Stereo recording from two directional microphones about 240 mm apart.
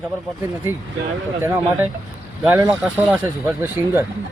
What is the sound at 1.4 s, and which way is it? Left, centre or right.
Speech, centre.